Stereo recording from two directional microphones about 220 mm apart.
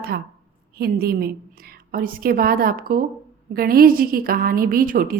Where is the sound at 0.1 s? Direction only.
45° right (ahead or behind).